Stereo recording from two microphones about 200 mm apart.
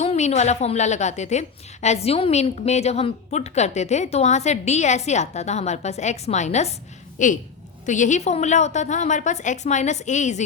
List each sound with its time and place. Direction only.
0.0 s a woman's voice: 35° left (ahead or behind)